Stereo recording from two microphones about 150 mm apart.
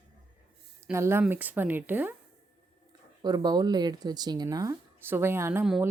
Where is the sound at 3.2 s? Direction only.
25° right (ahead or behind).